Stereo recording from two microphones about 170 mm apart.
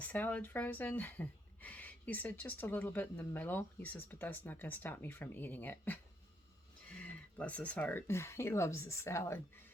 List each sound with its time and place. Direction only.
0.0 s speech: 10° left (ahead or behind)
7.3 s speech: 10° left (ahead or behind)